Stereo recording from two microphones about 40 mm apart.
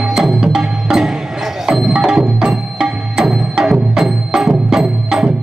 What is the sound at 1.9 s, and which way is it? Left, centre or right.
Music, centre.